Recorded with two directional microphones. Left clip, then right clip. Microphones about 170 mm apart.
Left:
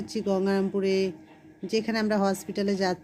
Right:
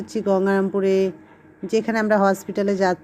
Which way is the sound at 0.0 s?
10° right (ahead or behind).